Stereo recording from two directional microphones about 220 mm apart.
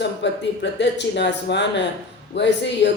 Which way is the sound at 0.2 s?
50° left (ahead or behind).